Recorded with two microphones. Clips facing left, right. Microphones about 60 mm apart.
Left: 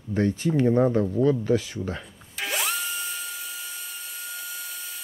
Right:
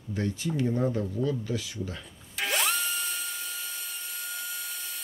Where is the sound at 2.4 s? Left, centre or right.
Centre.